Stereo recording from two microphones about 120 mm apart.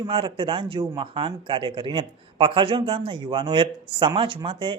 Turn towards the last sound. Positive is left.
turn(degrees=-45)  # may be behind; listen again after turning